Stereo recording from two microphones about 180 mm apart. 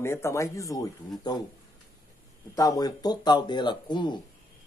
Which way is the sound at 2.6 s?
20° left (ahead or behind).